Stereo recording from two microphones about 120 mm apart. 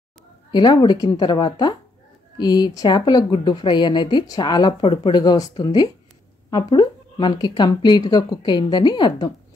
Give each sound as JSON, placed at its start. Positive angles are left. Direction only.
{"t": 0.5, "sound": "a woman's voice", "side_deg": 35}